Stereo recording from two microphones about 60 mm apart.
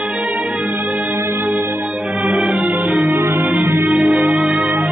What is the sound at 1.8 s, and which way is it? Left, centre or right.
Music, centre.